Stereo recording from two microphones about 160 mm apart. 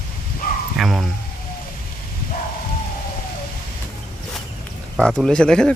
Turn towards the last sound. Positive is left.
turn(degrees=5)  # may be behind; listen again after turning